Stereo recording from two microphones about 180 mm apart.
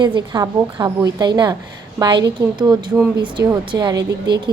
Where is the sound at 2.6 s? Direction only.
25° right (ahead or behind).